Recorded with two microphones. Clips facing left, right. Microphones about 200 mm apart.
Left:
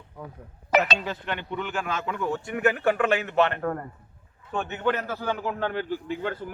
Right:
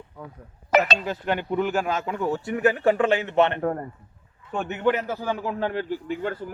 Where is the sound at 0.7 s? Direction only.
40° right (ahead or behind).